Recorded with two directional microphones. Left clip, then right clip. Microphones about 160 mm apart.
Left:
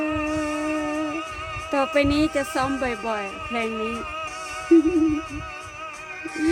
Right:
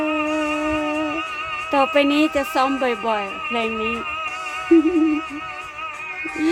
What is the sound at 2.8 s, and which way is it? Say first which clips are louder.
Music: right 5 dB; 15° right (ahead or behind).